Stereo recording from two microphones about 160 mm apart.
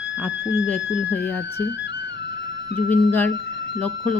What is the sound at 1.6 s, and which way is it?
Music, 90° left.